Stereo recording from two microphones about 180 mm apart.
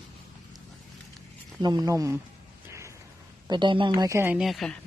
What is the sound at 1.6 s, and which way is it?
Speech, 20° right (ahead or behind).